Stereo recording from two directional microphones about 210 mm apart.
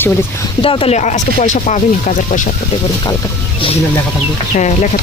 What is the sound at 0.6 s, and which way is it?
Speech, 25° left (ahead or behind).